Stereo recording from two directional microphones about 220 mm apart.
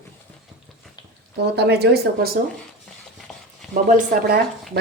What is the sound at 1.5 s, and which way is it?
Speech, 50° right (ahead or behind).